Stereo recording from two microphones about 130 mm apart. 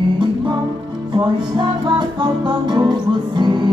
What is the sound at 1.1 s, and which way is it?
Music, 35° right (ahead or behind).